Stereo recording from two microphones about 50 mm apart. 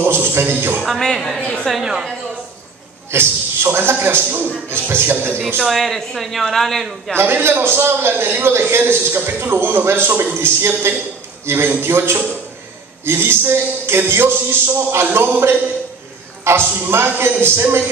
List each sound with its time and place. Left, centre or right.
0.0 s a man's voice: right
0.8 s speech: centre
1.7 s a woman's voice: centre
3.1 s a man's voice: right
5.6 s speech: centre
7.2 s a man's voice: right
16.5 s a man's voice: right